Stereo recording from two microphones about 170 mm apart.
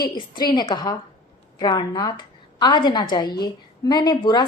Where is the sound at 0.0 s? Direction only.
25° left (ahead or behind).